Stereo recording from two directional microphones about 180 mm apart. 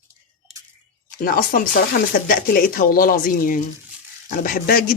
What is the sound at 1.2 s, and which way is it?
Speech, 50° left (ahead or behind).